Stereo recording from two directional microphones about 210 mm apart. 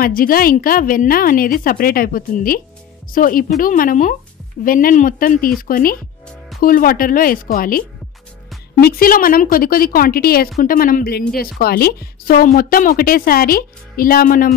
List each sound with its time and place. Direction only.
0.0 s a woman's voice: 45° left (ahead or behind)
8.8 s a woman's voice: 45° left (ahead or behind)